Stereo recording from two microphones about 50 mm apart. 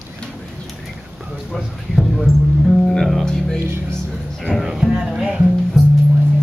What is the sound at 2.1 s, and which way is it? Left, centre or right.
Music, centre.